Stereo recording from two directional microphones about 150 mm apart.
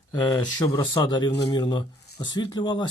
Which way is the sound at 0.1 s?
25° left (ahead or behind).